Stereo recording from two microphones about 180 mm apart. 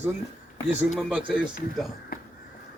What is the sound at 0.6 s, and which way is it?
Speech, centre (ahead or behind).